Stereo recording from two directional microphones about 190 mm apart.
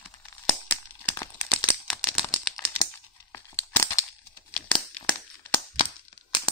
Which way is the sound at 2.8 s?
15° left (ahead or behind).